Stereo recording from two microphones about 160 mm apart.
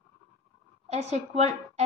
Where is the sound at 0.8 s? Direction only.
45° right (ahead or behind).